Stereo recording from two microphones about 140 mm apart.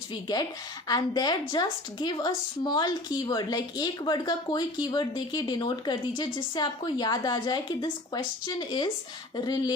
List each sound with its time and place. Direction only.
0.9 s a woman's voice: 30° left (ahead or behind)